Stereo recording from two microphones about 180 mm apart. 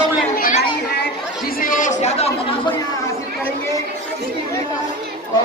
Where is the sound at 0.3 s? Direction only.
55° left (ahead or behind).